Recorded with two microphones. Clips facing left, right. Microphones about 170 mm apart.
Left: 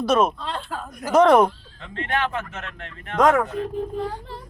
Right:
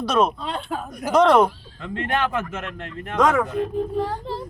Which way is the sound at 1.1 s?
10° left (ahead or behind).